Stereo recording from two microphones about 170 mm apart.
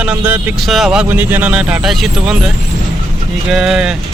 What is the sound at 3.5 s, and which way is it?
Speech, 5° right (ahead or behind).